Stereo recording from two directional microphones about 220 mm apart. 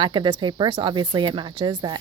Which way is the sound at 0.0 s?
20° right (ahead or behind).